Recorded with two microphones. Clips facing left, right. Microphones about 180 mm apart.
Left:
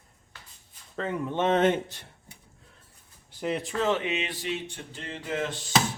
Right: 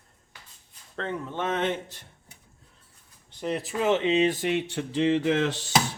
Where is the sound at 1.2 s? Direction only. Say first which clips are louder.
Left 8 dB; 20° left (ahead or behind).